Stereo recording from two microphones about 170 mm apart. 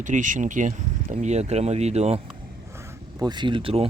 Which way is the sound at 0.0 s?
50° right (ahead or behind).